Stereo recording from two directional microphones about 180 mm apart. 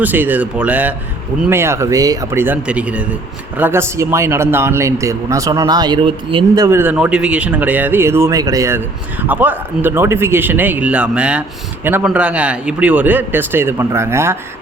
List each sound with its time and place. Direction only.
0.0 s speech: 10° right (ahead or behind); by 6.7 s 30° right (ahead or behind)
6.7 s speech: 10° right (ahead or behind)